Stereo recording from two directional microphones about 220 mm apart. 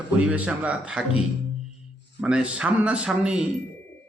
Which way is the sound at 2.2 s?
5° right (ahead or behind).